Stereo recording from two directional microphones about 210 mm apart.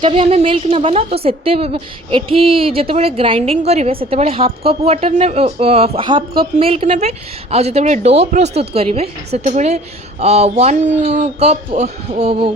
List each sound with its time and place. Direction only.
0.0 s a woman's voice: 30° right (ahead or behind)